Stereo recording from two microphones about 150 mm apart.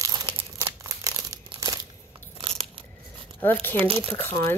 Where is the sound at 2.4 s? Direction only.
40° right (ahead or behind).